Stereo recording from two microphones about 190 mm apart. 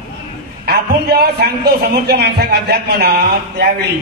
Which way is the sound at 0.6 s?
55° right (ahead or behind).